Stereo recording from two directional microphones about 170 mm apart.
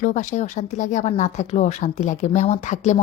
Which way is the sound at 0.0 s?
45° left (ahead or behind).